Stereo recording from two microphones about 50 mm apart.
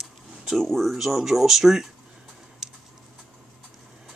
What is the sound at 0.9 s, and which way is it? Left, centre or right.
Speech, centre.